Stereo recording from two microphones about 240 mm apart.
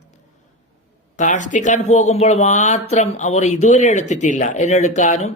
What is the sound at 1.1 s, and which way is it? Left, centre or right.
Speech, left.